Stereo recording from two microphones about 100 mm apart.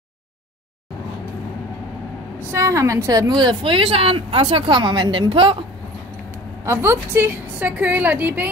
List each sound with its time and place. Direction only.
2.5 s a woman's voice: 30° right (ahead or behind); by 5.6 s 60° right (ahead or behind)
6.6 s a woman's voice: 25° right (ahead or behind)